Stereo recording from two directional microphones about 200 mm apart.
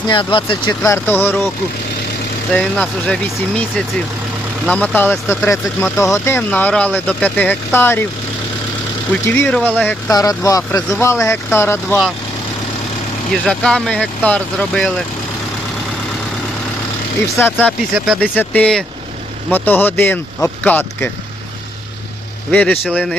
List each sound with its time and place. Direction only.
0.1 s speech: 25° left (ahead or behind)
0.9 s speech: 10° left (ahead or behind)
2.5 s speech: 5° left (ahead or behind)
9.2 s speech: 10° left (ahead or behind)
13.4 s speech: 5° left (ahead or behind)
17.3 s speech: 10° left (ahead or behind)
17.9 s speech: centre (ahead or behind)
22.5 s speech: 5° left (ahead or behind)